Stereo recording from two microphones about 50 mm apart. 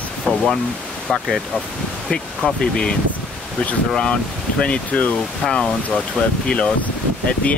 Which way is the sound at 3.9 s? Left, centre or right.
Centre.